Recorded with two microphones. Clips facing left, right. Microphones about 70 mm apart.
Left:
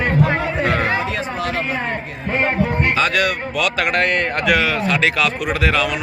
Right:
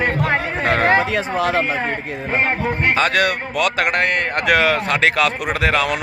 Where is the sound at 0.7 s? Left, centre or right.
Right.